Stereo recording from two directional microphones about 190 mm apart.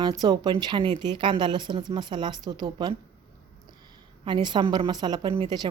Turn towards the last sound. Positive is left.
turn(degrees=-20)  # may be behind; listen again after turning